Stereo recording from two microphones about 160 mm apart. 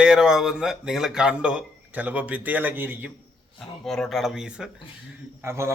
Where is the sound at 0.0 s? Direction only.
5° right (ahead or behind).